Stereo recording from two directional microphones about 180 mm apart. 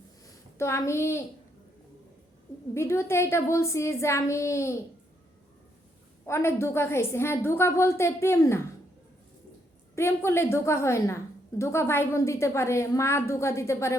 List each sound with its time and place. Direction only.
0.6 s a woman's voice: 15° left (ahead or behind)
2.7 s a woman's voice: 15° left (ahead or behind)
6.2 s a woman's voice: 15° left (ahead or behind)
9.9 s a woman's voice: 15° left (ahead or behind)